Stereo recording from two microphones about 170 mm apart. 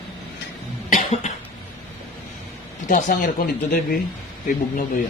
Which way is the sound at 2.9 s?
50° left (ahead or behind).